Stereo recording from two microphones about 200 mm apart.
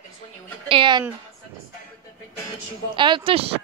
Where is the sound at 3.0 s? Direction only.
25° right (ahead or behind).